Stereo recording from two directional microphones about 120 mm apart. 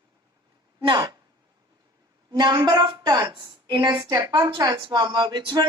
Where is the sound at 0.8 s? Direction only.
35° right (ahead or behind).